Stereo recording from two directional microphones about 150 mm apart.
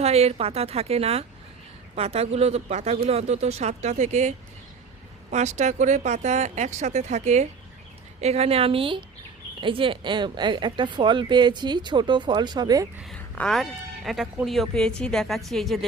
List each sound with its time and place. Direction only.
0.0 s speech: 45° right (ahead or behind); by 12.9 s 25° right (ahead or behind)
13.1 s speech: 5° left (ahead or behind)